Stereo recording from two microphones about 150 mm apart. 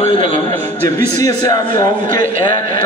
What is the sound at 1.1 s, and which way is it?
Speech, 25° left (ahead or behind).